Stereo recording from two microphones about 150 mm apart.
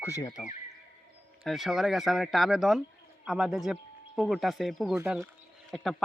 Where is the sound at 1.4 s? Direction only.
Centre (ahead or behind).